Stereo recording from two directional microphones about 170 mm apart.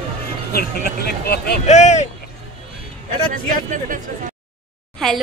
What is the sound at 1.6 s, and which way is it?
Speech, 40° left (ahead or behind).